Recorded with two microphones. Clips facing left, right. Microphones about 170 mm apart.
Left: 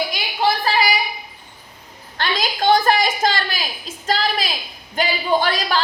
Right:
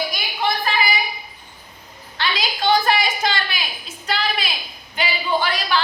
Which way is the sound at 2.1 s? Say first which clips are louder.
Left 2 dB; 45° left (ahead or behind).